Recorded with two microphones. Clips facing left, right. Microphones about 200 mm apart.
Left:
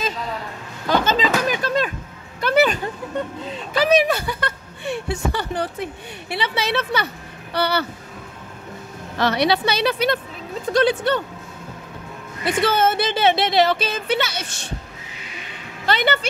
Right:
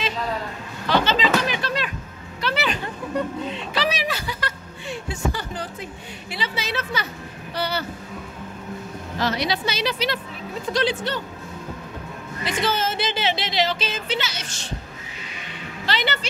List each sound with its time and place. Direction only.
0.8 s music: 45° left (ahead or behind)
2.4 s a sound: 50° left (ahead or behind)
3.5 s speech: 50° left (ahead or behind); by 7.8 s 70° left (ahead or behind)
9.2 s speech: 65° left (ahead or behind)
12.6 s speech: 60° left (ahead or behind)
15.8 s a woman's voice: 50° left (ahead or behind)